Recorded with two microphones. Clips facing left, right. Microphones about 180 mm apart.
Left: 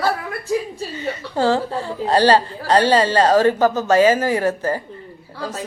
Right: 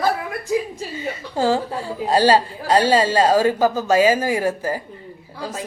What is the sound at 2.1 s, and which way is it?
A woman's voice, 10° right (ahead or behind).